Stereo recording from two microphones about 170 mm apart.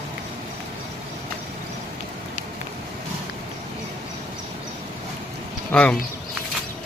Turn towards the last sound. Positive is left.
turn(degrees=5)  # may be behind; listen again after turning